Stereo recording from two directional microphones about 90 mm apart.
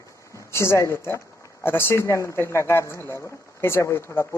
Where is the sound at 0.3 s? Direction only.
30° left (ahead or behind).